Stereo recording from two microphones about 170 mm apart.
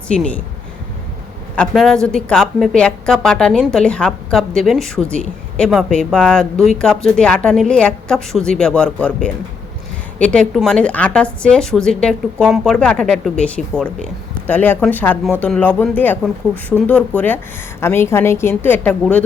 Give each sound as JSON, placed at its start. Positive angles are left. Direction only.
{"t": 0.1, "sound": "a woman's voice", "side_deg": 5}
{"t": 1.5, "sound": "a woman's voice", "side_deg": 0}